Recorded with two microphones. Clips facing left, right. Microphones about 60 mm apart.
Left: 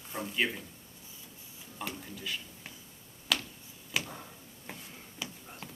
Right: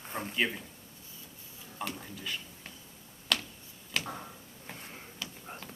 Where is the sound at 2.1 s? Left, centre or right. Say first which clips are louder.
Even; centre.